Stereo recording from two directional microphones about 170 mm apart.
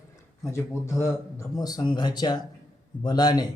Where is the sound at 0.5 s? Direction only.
15° left (ahead or behind).